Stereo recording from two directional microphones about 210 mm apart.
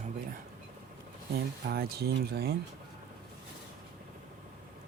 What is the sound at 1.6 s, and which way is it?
Speech, 50° right (ahead or behind).